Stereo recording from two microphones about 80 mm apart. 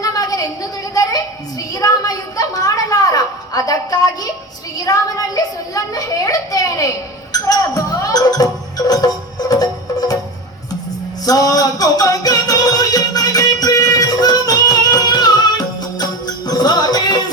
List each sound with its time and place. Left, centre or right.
0.0 s a sound: left
7.3 s music: left
11.3 s music: left